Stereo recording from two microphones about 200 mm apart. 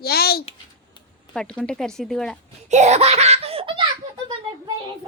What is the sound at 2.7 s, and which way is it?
A child's voice, 35° right (ahead or behind).